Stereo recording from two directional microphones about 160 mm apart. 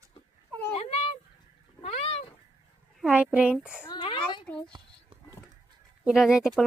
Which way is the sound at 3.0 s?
5° right (ahead or behind).